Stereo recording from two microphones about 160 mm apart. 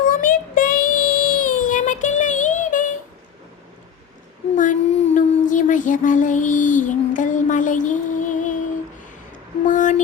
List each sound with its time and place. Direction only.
0.1 s child singing: 60° left (ahead or behind)
4.5 s child singing: 50° left (ahead or behind)
9.6 s a sound: 55° left (ahead or behind)